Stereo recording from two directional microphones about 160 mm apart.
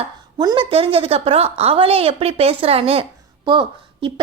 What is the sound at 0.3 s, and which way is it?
A woman's voice, 30° right (ahead or behind).